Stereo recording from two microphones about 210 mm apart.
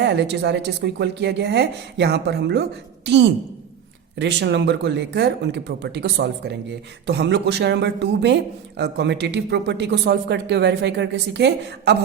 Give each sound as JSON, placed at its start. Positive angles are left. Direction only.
{"t": 0.0, "sound": "speech", "side_deg": -55}